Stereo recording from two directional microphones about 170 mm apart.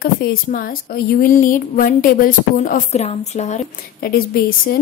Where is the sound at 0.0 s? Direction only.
60° left (ahead or behind); by 3.6 s 40° left (ahead or behind).